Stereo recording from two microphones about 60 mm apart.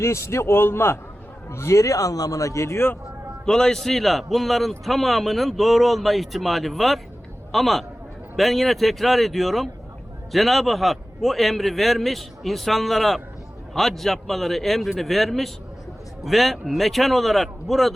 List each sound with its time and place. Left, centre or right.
0.0 s a man's voice: left
3.4 s a man's voice: centre